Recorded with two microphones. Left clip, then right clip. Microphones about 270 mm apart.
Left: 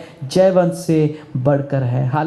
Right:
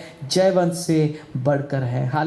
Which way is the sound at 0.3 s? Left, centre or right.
Left.